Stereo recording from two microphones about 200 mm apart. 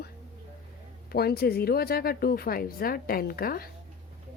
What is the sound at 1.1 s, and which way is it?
A woman's voice, 50° left (ahead or behind).